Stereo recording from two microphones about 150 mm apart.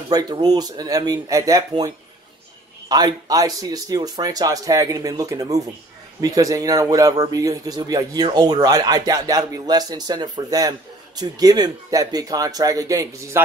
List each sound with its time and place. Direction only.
0.1 s speech: 25° right (ahead or behind)
2.9 s speech: 25° right (ahead or behind)